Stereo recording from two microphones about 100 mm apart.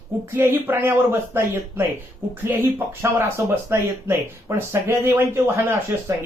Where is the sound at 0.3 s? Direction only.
20° right (ahead or behind).